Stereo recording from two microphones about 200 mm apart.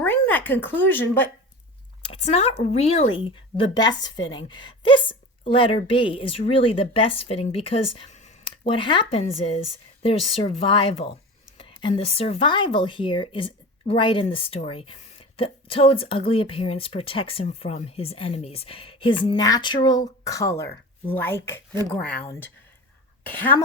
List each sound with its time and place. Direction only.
0.0 s speech: 10° left (ahead or behind)
2.3 s a woman's voice: 30° left (ahead or behind); by 21.8 s 10° left (ahead or behind)
23.2 s speech: 10° left (ahead or behind)